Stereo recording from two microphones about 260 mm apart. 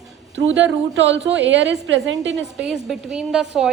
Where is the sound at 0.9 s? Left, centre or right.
Right.